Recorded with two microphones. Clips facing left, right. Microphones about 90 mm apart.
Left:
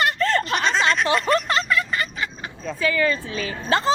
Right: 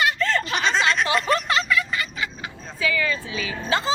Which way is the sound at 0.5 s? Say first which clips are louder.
Left 1 dB; centre (ahead or behind).